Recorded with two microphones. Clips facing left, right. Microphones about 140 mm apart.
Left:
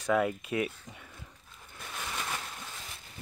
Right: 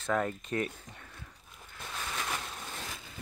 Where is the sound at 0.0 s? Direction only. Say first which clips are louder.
Left 3 dB; 10° left (ahead or behind).